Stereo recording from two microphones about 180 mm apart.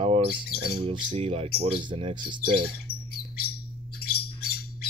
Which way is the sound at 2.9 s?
35° left (ahead or behind).